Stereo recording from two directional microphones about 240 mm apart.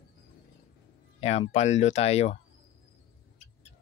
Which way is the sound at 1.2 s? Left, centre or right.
Left.